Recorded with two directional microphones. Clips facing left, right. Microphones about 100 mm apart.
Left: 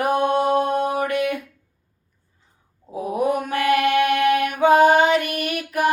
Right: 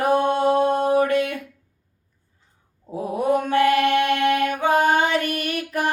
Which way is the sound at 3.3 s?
30° right (ahead or behind).